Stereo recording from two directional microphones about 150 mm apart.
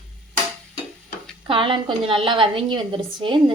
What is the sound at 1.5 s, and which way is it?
A woman's voice, 35° right (ahead or behind).